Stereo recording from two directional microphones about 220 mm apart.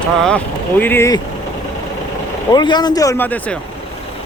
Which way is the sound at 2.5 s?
20° left (ahead or behind).